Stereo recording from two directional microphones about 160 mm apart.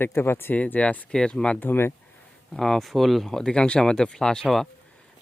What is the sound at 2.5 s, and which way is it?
Speech, 5° left (ahead or behind).